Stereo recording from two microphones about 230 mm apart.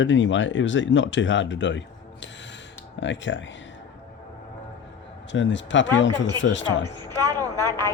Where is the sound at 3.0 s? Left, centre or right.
Left.